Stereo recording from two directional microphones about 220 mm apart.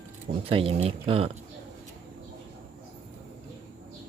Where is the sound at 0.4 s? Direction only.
25° right (ahead or behind).